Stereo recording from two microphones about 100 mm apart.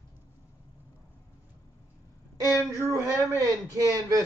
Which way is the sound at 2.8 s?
30° right (ahead or behind).